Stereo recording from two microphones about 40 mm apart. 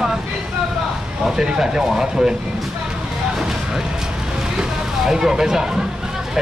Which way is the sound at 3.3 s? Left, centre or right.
Centre.